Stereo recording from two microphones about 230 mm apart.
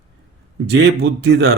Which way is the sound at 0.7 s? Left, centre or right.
Right.